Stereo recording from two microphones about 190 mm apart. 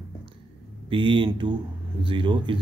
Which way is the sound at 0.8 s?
25° right (ahead or behind).